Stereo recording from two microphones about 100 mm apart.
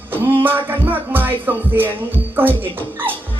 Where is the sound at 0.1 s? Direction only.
20° right (ahead or behind).